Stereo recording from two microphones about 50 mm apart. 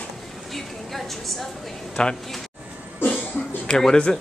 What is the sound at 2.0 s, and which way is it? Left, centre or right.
Speech, centre.